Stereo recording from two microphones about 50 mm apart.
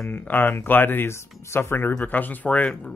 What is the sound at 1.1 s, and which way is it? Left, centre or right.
Speech, left.